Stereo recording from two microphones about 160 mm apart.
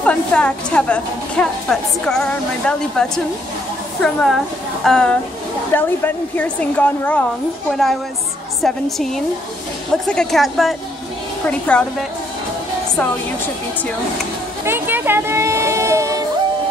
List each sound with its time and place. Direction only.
0.0 s a woman's voice: 5° left (ahead or behind)
14.6 s speech: 15° right (ahead or behind)